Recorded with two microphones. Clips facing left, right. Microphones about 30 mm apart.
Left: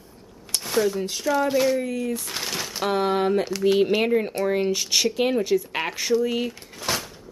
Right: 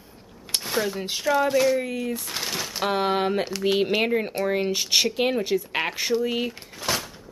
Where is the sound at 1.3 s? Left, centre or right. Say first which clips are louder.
Right 1 dB; centre.